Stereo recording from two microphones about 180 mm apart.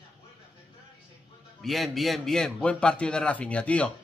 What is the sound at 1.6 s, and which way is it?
A man's voice, centre (ahead or behind).